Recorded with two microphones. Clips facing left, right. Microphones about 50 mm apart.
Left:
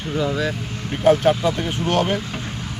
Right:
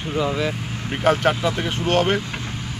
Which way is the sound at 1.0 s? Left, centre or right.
Right.